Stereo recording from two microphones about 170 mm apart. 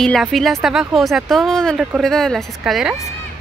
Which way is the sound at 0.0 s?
Centre (ahead or behind).